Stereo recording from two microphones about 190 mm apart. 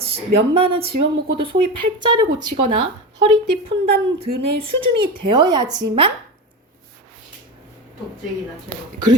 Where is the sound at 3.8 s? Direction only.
30° right (ahead or behind).